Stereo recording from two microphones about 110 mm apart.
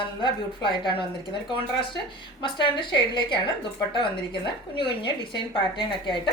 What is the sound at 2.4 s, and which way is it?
A woman's voice, 45° left (ahead or behind).